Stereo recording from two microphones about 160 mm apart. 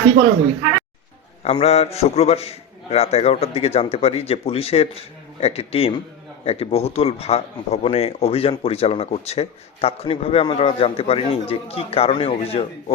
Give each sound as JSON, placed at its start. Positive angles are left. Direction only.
{"t": 1.5, "sound": "speech", "side_deg": 40}